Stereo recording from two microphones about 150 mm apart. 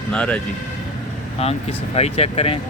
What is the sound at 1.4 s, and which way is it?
Speech, 45° left (ahead or behind).